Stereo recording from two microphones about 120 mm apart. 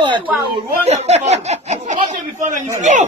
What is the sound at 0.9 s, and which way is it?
Speech, 65° right (ahead or behind).